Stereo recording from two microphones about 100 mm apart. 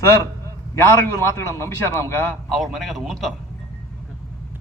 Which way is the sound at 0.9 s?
30° left (ahead or behind).